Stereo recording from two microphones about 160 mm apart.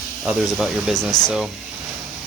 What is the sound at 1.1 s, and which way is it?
Speech, 25° left (ahead or behind).